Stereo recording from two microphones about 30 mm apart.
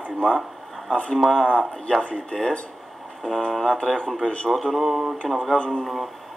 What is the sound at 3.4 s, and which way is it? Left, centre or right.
Speech, left.